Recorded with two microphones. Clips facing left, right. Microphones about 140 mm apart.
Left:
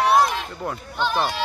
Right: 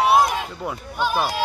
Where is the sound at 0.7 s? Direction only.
10° right (ahead or behind).